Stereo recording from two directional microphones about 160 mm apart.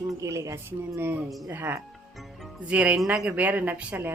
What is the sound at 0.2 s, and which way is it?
Speech, 20° right (ahead or behind).